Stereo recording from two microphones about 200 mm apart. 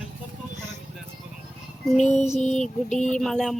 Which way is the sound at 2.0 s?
35° left (ahead or behind).